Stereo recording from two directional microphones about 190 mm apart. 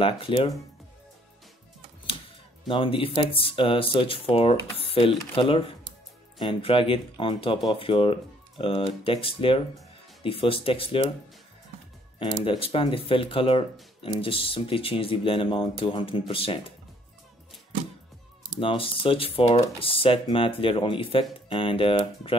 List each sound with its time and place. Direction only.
0.0 s speech: 30° left (ahead or behind)
2.7 s speech: 30° left (ahead or behind)
12.2 s speech: 30° left (ahead or behind)
18.6 s speech: 30° left (ahead or behind)